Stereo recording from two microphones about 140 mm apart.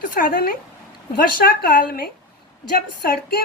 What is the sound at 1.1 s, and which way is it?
Speech, 90° left.